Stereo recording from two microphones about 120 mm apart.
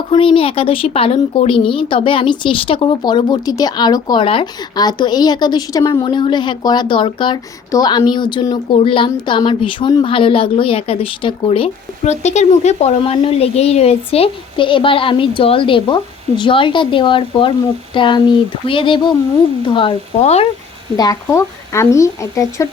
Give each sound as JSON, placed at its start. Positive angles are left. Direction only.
{"t": 0.1, "sound": "a woman's voice", "side_deg": 45}
{"t": 4.8, "sound": "a woman's voice", "side_deg": 35}
{"t": 12.2, "sound": "a woman's voice", "side_deg": 70}
{"t": 20.2, "sound": "speech", "side_deg": 60}
{"t": 20.9, "sound": "speech", "side_deg": 30}